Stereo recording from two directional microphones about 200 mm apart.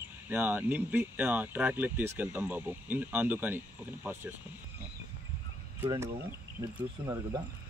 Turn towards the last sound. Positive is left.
turn(degrees=-15)  # may be behind; listen again after turning